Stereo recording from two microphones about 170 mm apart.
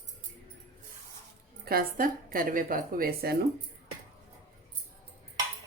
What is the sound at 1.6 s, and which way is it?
A woman's voice, 60° right (ahead or behind).